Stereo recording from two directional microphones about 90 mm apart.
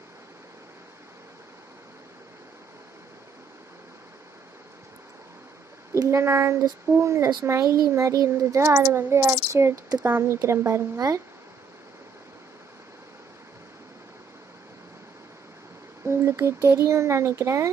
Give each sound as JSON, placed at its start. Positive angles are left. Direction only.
{"t": 5.9, "sound": "a child's voice", "side_deg": -30}
{"t": 16.0, "sound": "a child's voice", "side_deg": -30}